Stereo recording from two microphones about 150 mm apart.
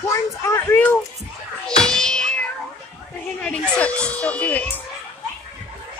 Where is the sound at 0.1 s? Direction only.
20° left (ahead or behind).